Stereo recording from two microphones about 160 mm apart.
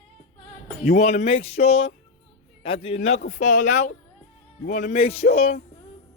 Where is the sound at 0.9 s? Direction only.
45° left (ahead or behind).